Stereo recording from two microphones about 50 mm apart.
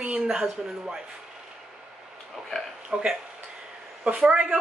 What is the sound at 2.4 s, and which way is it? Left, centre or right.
Speech, centre.